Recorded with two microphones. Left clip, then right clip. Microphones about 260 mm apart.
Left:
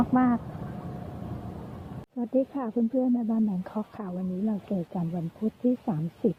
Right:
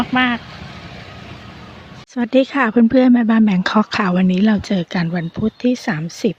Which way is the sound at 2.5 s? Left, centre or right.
Right.